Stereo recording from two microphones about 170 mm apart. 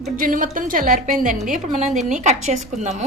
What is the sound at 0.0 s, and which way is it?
Speech, 50° right (ahead or behind).